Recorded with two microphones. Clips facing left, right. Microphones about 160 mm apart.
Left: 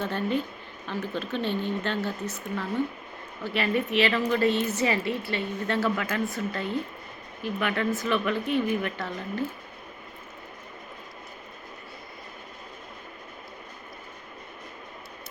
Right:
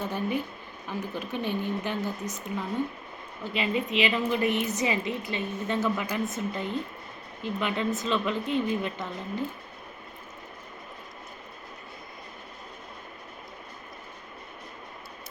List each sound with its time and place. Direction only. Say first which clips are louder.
0.0 s a woman's voice: left 2 dB; 10° right (ahead or behind)